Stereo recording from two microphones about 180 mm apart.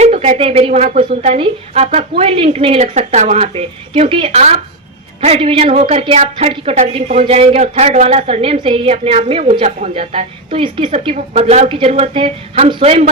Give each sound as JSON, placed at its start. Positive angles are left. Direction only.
{"t": 0.0, "sound": "a woman's voice", "side_deg": -35}